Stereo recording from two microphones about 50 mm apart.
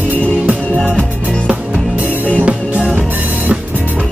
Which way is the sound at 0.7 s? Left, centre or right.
Left.